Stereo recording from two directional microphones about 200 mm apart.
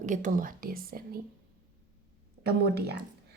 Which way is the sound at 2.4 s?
55° right (ahead or behind).